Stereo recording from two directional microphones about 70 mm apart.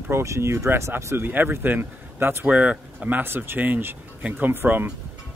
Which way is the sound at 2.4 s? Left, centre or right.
Centre.